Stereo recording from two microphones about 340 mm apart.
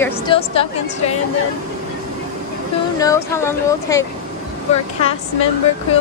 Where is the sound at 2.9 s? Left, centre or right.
Centre.